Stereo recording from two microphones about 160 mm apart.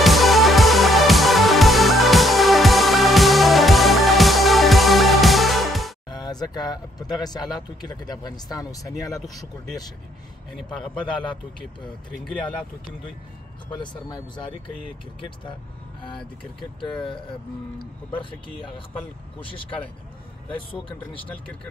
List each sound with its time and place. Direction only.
0.0 s music: centre (ahead or behind)
6.0 s speech: 25° left (ahead or behind)
10.5 s a man's voice: centre (ahead or behind)
13.7 s speech: 30° left (ahead or behind)
17.0 s speech: 30° left (ahead or behind)